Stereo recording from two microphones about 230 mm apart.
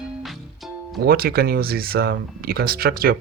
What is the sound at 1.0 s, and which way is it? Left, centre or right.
Speech, right.